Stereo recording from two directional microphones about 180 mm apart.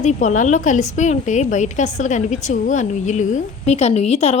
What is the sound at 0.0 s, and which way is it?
A woman's voice, 40° left (ahead or behind).